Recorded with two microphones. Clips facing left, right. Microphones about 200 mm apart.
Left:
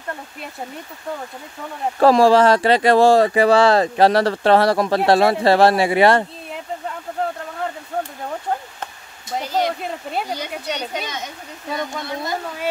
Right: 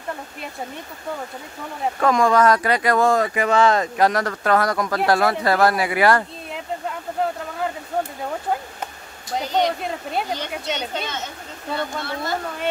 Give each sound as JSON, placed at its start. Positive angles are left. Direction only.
{"t": 2.0, "sound": "speech", "side_deg": 30}
{"t": 9.3, "sound": "a child's voice", "side_deg": 0}